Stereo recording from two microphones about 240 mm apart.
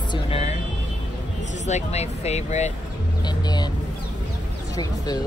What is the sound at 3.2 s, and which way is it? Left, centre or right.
Vehicle, centre.